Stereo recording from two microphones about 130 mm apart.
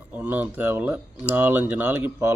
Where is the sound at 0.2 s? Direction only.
10° right (ahead or behind).